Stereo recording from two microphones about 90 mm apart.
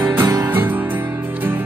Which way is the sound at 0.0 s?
30° right (ahead or behind).